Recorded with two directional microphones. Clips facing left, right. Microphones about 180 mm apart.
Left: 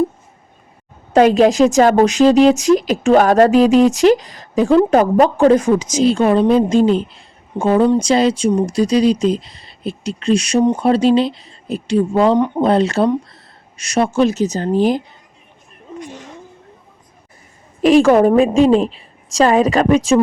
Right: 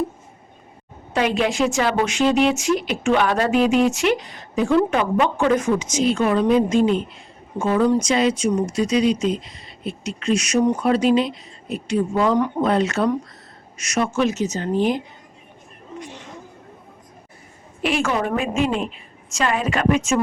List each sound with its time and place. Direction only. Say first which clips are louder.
1.1 s a woman's voice: left 10 dB; 40° left (ahead or behind)
17.8 s a woman's voice: left 12 dB; 40° left (ahead or behind)